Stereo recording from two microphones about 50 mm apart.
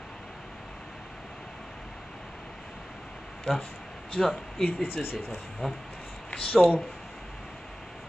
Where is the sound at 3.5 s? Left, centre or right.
Centre.